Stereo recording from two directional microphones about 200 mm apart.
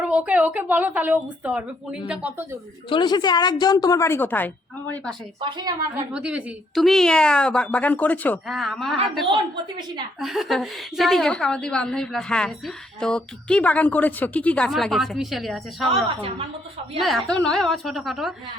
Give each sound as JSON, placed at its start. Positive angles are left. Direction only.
{"t": 0.0, "sound": "a woman's voice", "side_deg": -5}
{"t": 2.9, "sound": "a woman's voice", "side_deg": 20}
{"t": 5.4, "sound": "a woman's voice", "side_deg": -25}
{"t": 6.1, "sound": "a woman's voice", "side_deg": -5}
{"t": 9.2, "sound": "a woman's voice", "side_deg": -20}
{"t": 10.2, "sound": "a woman's voice", "side_deg": 0}
{"t": 17.0, "sound": "a woman's voice", "side_deg": 0}